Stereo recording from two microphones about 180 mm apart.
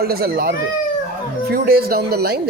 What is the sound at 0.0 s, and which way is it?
Speech, 55° right (ahead or behind).